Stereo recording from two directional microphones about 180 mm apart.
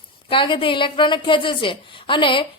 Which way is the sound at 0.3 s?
30° left (ahead or behind).